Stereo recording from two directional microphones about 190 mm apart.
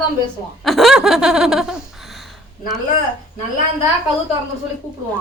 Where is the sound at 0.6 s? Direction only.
Centre (ahead or behind).